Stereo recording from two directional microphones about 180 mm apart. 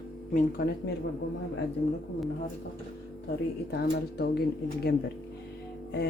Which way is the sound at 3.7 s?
65° left (ahead or behind).